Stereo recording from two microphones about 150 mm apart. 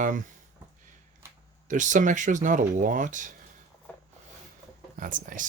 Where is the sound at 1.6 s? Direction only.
55° right (ahead or behind).